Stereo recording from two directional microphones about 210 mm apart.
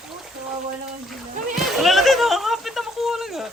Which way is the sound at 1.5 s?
Centre (ahead or behind).